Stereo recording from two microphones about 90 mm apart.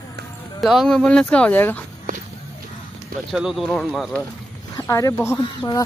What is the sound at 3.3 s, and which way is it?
Speech, 5° right (ahead or behind).